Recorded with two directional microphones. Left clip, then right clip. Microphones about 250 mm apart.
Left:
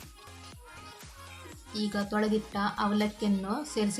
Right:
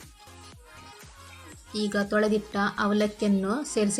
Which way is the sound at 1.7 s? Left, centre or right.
Centre.